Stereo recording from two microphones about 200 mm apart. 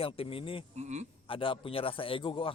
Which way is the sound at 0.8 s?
35° right (ahead or behind).